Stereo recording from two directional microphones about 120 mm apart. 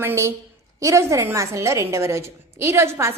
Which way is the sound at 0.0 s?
20° right (ahead or behind).